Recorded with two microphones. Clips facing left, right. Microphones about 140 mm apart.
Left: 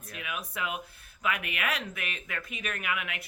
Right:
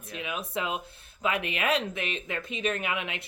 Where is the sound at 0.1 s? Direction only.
25° right (ahead or behind).